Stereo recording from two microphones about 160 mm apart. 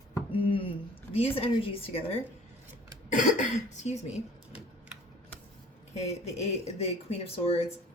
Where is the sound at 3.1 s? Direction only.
50° left (ahead or behind).